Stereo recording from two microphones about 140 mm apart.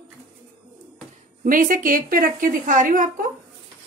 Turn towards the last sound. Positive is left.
turn(degrees=-75)  # may be behind; listen again after turning